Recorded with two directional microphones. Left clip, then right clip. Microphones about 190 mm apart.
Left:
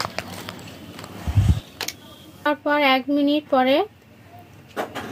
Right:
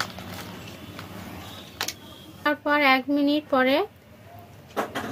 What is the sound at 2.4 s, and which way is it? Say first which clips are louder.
Speech: left 2 dB; 30° left (ahead or behind).